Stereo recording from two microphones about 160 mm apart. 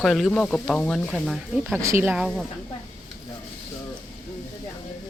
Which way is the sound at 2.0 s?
5° right (ahead or behind).